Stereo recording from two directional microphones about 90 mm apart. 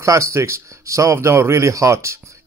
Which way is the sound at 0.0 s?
35° right (ahead or behind).